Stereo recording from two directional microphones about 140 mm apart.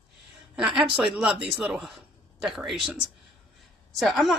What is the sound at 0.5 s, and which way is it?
Speech, 5° right (ahead or behind).